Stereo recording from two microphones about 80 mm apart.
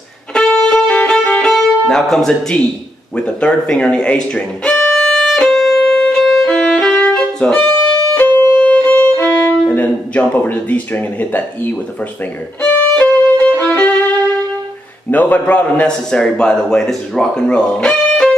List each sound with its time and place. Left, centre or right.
0.3 s music: centre
8.1 s violin: left
12.9 s violin: centre
15.0 s a man's voice: left